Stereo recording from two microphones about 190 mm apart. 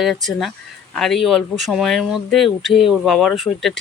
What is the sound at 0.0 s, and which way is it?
Speech, centre (ahead or behind).